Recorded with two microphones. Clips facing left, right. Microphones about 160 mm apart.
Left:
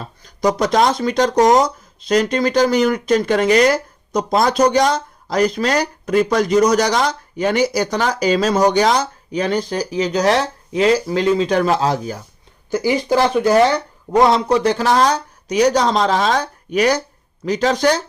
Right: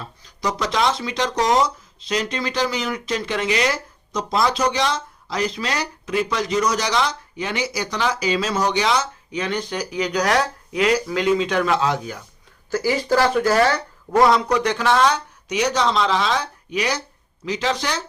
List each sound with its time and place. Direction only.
0.0 s speech: 45° left (ahead or behind)
12.7 s speech: 15° left (ahead or behind); by 18.0 s 45° left (ahead or behind)